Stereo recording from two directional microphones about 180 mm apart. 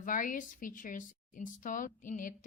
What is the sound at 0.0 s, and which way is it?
A woman's voice, 45° left (ahead or behind).